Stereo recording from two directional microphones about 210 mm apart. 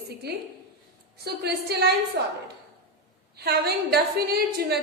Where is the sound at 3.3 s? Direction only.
50° right (ahead or behind).